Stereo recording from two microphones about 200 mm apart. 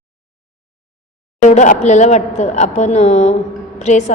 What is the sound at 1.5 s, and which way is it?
A woman's voice, 35° left (ahead or behind).